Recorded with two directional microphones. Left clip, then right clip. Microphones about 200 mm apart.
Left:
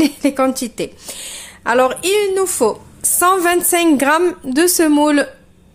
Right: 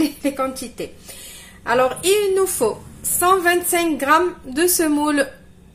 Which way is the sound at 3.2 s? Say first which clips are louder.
Left 2 dB; 50° left (ahead or behind).